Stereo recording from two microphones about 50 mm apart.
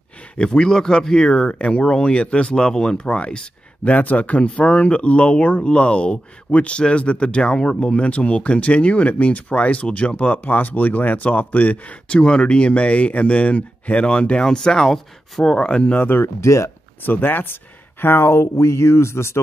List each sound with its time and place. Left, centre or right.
0.4 s speech: centre
16.0 s speech: left
16.3 s speech: left
17.0 s speech: left